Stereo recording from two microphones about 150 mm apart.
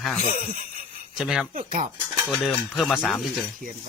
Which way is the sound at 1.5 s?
65° right (ahead or behind).